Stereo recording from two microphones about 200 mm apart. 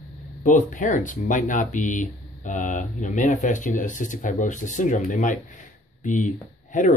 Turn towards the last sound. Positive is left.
turn(degrees=40)  # may be behind; listen again after turning